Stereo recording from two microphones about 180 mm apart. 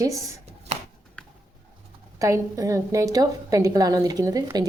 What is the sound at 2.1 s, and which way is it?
A woman's voice, 15° right (ahead or behind).